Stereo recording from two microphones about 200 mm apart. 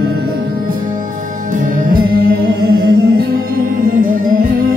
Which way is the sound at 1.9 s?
50° right (ahead or behind).